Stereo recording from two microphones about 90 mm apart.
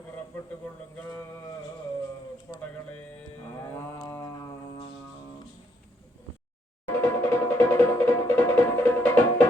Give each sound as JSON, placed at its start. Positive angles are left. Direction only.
{"t": 2.5, "sound": "music", "side_deg": 35}
{"t": 3.6, "sound": "livestock", "side_deg": 30}
{"t": 4.2, "sound": "music", "side_deg": 45}
{"t": 6.8, "sound": "music", "side_deg": 25}